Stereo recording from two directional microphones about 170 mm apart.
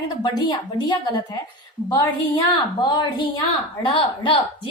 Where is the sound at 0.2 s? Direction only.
25° left (ahead or behind).